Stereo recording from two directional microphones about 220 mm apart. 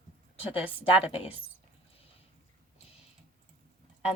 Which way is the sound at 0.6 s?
25° left (ahead or behind).